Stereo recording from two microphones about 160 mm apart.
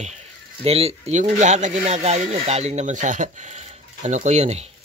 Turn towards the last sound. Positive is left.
turn(degrees=-45)  # may be behind; listen again after turning